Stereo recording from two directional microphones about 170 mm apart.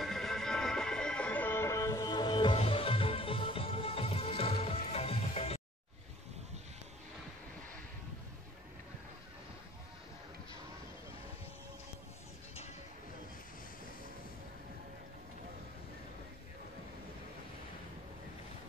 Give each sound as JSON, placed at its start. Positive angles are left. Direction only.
{"t": 0.0, "sound": "music", "side_deg": 0}